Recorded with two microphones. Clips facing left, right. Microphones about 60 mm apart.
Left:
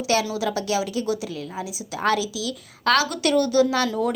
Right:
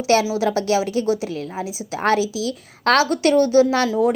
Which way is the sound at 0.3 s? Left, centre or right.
Right.